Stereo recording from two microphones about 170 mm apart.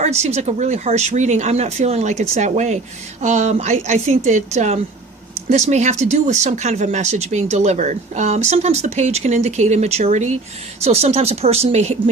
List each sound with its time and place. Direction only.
0.0 s speech: 40° right (ahead or behind)